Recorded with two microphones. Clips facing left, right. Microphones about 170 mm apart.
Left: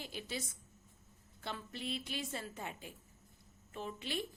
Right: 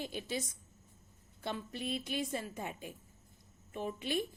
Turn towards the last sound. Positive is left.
turn(degrees=-15)  # may be behind; listen again after turning